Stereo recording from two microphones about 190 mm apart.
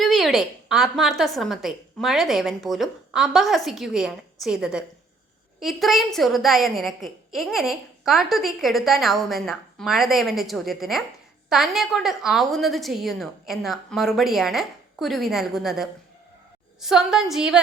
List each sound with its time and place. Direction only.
0.0 s a woman's voice: centre (ahead or behind)